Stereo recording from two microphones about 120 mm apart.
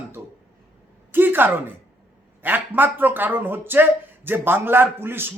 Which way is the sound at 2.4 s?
15° right (ahead or behind).